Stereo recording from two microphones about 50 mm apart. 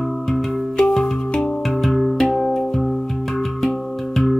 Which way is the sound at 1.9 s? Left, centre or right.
Centre.